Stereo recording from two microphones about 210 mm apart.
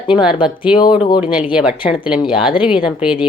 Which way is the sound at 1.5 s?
5° right (ahead or behind).